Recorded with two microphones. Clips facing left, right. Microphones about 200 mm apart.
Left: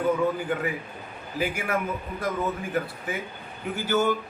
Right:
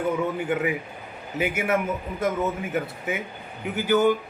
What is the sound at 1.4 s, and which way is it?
Speech, 20° right (ahead or behind).